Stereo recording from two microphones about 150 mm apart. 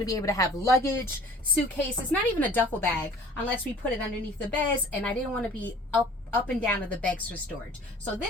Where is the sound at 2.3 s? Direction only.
10° left (ahead or behind).